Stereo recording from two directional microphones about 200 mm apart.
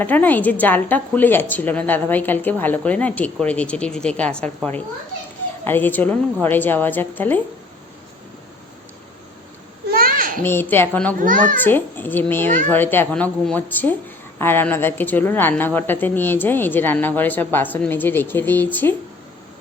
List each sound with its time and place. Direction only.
0.0 s a woman's voice: 10° left (ahead or behind)
9.9 s babbling: 45° right (ahead or behind)
10.4 s a woman's voice: 10° left (ahead or behind)
11.2 s a child's voice: 40° right (ahead or behind)
11.5 s a woman's voice: 10° left (ahead or behind)